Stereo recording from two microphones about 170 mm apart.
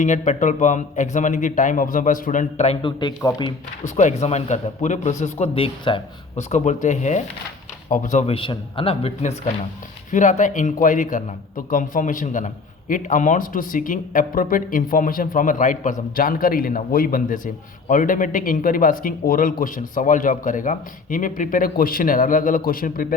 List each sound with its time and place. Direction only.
0.0 s speech: 45° left (ahead or behind)
2.8 s speech: 25° left (ahead or behind)
3.8 s a man's voice: 45° left (ahead or behind)
6.5 s speech: 45° left (ahead or behind)
8.4 s a man's voice: 30° left (ahead or behind)
10.1 s speech: 45° left (ahead or behind)